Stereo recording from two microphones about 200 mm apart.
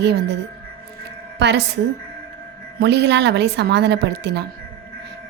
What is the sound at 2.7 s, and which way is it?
A woman's voice, 60° right (ahead or behind).